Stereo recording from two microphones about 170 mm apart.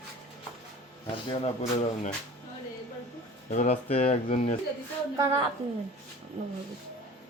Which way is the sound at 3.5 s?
40° left (ahead or behind).